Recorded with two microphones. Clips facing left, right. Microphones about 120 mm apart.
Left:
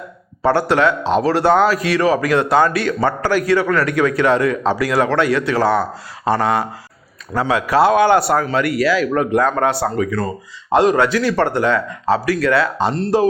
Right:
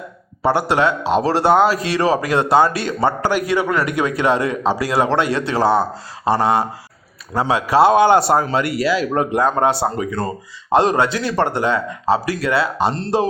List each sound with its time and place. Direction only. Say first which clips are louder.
0.4 s speech: left 2 dB; 20° right (ahead or behind)